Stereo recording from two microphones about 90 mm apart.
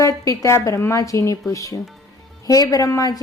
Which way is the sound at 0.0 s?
35° left (ahead or behind).